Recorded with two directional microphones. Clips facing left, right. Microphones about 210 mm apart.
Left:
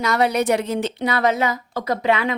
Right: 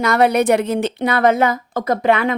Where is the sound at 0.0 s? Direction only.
55° right (ahead or behind).